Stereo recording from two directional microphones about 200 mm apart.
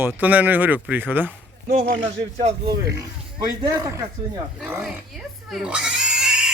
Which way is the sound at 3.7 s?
20° right (ahead or behind).